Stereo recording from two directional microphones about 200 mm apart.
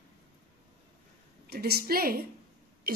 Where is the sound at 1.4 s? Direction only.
50° right (ahead or behind).